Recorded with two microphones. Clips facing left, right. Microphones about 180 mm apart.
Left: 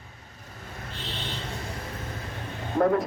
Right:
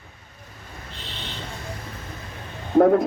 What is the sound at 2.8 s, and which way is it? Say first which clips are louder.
Speech: right 7 dB; 45° right (ahead or behind).